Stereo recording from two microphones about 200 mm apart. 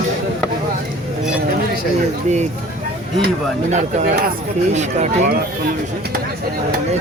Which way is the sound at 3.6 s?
40° right (ahead or behind).